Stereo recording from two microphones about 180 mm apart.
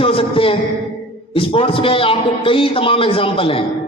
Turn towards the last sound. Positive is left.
turn(degrees=30)  # may be behind; listen again after turning